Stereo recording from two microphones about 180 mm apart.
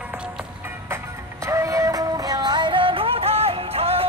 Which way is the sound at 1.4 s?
15° right (ahead or behind).